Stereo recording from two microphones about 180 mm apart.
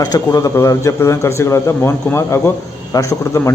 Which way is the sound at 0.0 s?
20° left (ahead or behind).